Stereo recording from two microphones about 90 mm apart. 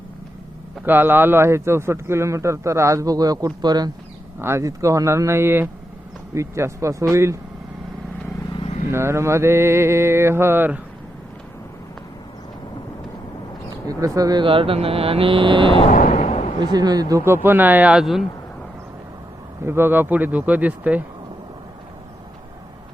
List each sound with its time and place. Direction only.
0.9 s a man's voice: 20° right (ahead or behind); by 3.9 s 50° right (ahead or behind)
4.4 s a man's voice: 30° right (ahead or behind)
8.9 s mantra: 30° right (ahead or behind)
13.8 s speech: 40° right (ahead or behind)
14.4 s speech: 80° right
16.7 s speech: 45° right (ahead or behind)
17.2 s mantra: 25° right (ahead or behind)
17.9 s speech: 5° right (ahead or behind)
19.6 s mantra: 25° right (ahead or behind)